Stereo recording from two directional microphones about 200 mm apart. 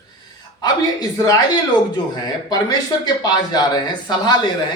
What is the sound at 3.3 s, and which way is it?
Speech, 20° left (ahead or behind).